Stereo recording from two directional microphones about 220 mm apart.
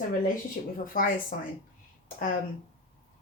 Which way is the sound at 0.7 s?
40° left (ahead or behind).